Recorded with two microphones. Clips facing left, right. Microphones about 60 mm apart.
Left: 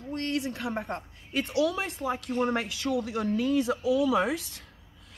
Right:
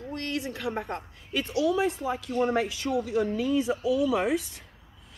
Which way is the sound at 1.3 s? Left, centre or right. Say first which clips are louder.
Even; left.